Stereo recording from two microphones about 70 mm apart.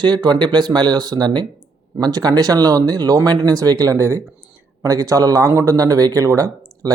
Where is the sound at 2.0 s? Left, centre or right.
Right.